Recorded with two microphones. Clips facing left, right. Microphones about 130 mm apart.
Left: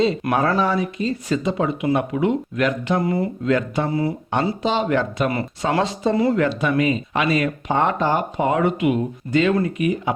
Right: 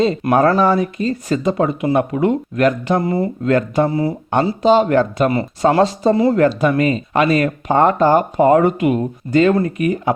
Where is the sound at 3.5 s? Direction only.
45° right (ahead or behind).